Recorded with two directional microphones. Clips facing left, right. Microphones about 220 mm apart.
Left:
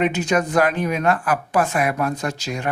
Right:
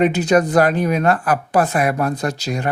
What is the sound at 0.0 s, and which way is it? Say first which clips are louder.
Speech: right 5 dB; 35° right (ahead or behind).